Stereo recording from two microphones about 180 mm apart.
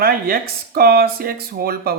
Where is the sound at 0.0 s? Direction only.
55° right (ahead or behind).